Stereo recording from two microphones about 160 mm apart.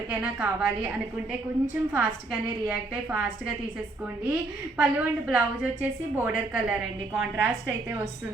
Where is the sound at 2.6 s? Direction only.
10° right (ahead or behind).